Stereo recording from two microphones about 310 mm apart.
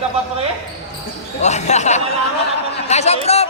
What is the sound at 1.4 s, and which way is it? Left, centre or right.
Speech, left.